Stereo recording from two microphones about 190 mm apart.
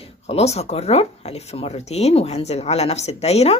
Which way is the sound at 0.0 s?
35° left (ahead or behind).